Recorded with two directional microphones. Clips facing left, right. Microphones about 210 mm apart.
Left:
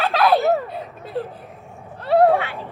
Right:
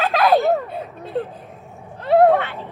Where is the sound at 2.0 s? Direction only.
15° right (ahead or behind).